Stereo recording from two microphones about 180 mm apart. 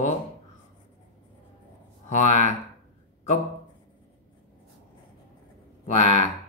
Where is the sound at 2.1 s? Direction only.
40° left (ahead or behind).